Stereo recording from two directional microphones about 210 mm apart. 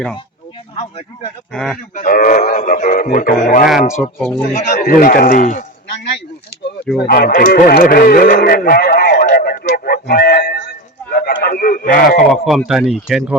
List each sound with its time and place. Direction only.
0.8 s speech: 30° left (ahead or behind)
1.5 s speech: centre (ahead or behind)
2.0 s speech: 40° left (ahead or behind)
4.2 s speech: 5° left (ahead or behind)
4.5 s speech: 40° left (ahead or behind)
7.0 s speech: 45° left (ahead or behind)
12.3 s speech: centre (ahead or behind)